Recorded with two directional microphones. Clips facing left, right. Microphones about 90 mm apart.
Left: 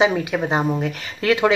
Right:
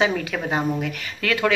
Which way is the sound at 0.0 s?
20° left (ahead or behind).